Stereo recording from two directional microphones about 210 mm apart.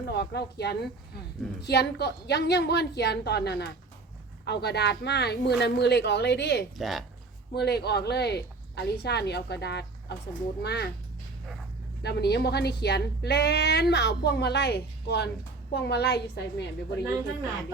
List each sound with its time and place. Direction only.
0.0 s a woman's voice: 50° left (ahead or behind)
6.7 s speech: centre (ahead or behind)
7.5 s a woman's voice: 50° left (ahead or behind)
12.0 s a woman's voice: 50° left (ahead or behind)